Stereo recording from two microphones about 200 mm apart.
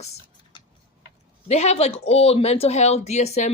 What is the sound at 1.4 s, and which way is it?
Speech, 35° left (ahead or behind).